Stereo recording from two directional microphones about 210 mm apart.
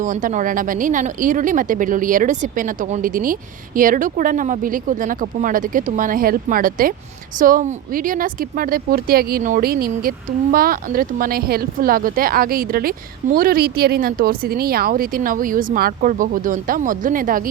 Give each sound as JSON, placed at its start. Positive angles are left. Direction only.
{"t": 0.0, "sound": "speech", "side_deg": -35}